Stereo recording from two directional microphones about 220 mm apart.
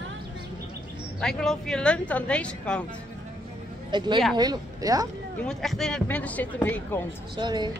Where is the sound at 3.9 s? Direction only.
20° right (ahead or behind).